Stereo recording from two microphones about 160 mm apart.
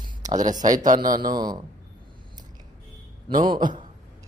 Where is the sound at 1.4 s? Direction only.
25° right (ahead or behind).